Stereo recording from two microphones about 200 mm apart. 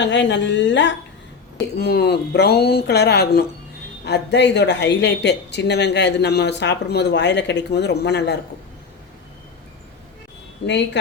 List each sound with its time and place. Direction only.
0.0 s speech: 65° left (ahead or behind)
1.7 s speech: 55° left (ahead or behind)
10.6 s speech: 65° left (ahead or behind)